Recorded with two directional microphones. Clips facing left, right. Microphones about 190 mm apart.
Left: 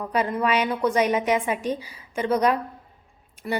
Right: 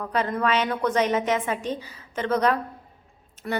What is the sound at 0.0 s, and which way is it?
A woman's voice, 10° left (ahead or behind).